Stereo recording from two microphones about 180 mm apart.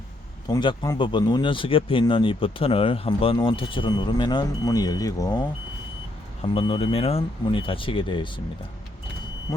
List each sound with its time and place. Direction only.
0.4 s speech: 25° left (ahead or behind)
6.4 s speech: 30° left (ahead or behind)